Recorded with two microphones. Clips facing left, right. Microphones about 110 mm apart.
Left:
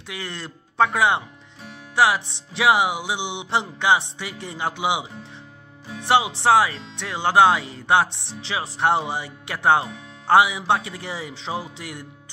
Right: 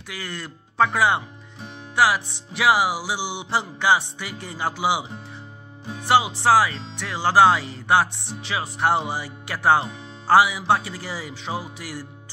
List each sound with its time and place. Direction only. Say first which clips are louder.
0.2 s speech: right 1 dB; 25° left (ahead or behind)
0.9 s music: even; 20° left (ahead or behind)
6.4 s music: even; 25° left (ahead or behind)